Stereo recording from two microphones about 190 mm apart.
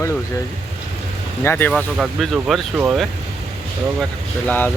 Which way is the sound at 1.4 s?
10° left (ahead or behind).